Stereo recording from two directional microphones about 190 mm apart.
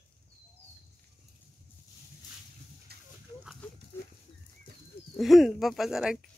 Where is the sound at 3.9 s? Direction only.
10° left (ahead or behind).